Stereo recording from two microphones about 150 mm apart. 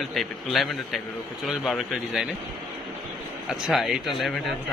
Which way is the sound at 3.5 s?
Centre (ahead or behind).